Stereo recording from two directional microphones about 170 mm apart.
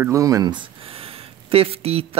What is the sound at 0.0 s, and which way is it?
Speech, 20° right (ahead or behind).